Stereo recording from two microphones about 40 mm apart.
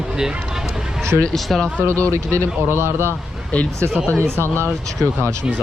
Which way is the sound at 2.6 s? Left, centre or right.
Right.